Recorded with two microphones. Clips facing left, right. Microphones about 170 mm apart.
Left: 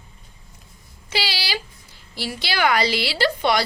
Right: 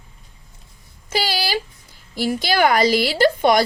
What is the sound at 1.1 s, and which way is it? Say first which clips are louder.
A woman's voice: right 5 dB; 45° right (ahead or behind).